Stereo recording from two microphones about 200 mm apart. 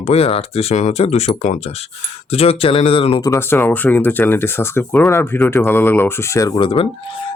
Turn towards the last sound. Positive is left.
turn(degrees=25)  # may be behind; listen again after turning